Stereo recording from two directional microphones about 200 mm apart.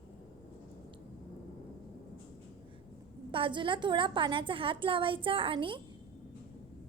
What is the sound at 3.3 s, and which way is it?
A woman's voice, 25° right (ahead or behind).